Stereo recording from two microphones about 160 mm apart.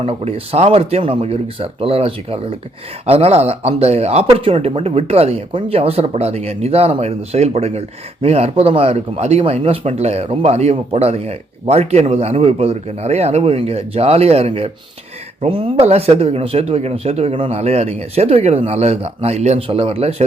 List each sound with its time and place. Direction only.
0.0 s speech: 35° right (ahead or behind)